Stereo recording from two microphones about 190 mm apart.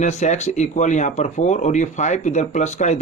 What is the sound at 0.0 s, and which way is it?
Speech, 35° left (ahead or behind).